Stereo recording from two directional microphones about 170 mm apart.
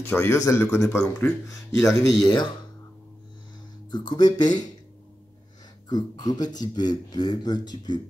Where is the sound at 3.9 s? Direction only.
25° left (ahead or behind).